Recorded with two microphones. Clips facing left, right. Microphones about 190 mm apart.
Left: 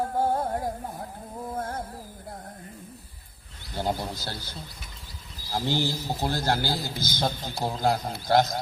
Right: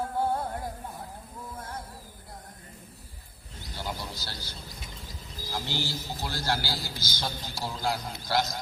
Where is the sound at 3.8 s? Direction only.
55° left (ahead or behind).